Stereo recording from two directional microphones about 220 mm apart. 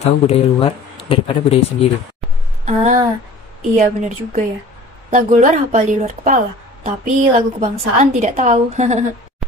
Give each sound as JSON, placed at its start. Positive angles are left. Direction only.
{"t": 0.0, "sound": "speech", "side_deg": 25}
{"t": 2.6, "sound": "a sound", "side_deg": -30}
{"t": 3.7, "sound": "a woman's voice", "side_deg": -30}